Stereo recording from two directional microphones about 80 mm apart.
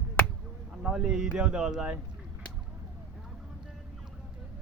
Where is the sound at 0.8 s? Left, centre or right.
Centre.